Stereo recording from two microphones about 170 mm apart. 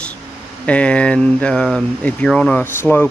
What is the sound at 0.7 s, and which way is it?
Speech, 5° left (ahead or behind).